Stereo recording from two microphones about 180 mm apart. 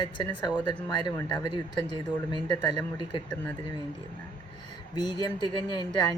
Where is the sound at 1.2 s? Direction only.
25° left (ahead or behind).